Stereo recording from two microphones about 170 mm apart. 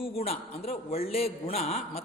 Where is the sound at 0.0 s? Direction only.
35° left (ahead or behind).